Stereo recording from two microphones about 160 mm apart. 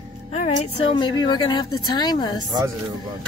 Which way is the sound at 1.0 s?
30° left (ahead or behind).